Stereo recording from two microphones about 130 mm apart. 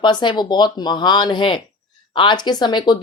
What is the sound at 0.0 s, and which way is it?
Speech, 35° left (ahead or behind).